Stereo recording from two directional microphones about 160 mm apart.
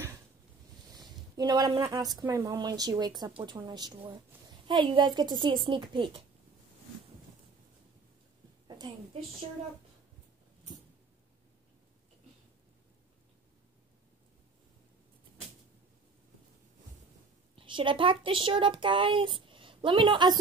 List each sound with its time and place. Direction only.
0.9 s speech: 25° right (ahead or behind)
8.6 s a sound: 25° right (ahead or behind)
17.6 s speech: 30° right (ahead or behind)